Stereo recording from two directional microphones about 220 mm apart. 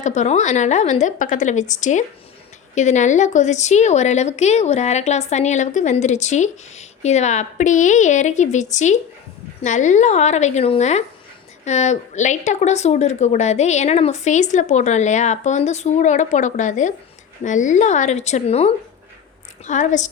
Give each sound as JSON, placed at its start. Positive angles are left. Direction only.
{"t": 0.0, "sound": "a woman's voice", "side_deg": 30}